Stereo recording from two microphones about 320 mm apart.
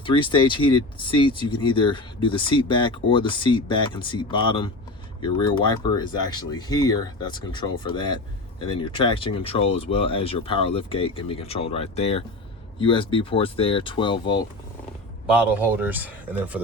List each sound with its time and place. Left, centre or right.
0.0 s speech: centre
15.3 s speech: centre